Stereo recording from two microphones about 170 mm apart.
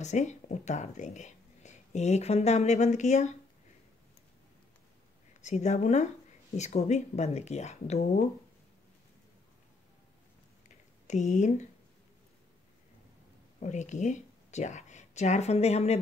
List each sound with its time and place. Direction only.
0.0 s speech: 45° left (ahead or behind)
5.4 s speech: 45° left (ahead or behind)
11.1 s speech: 45° left (ahead or behind)
13.6 s speech: 45° left (ahead or behind)